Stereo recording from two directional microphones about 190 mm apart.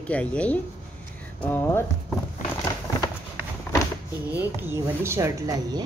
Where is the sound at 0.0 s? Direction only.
5° left (ahead or behind).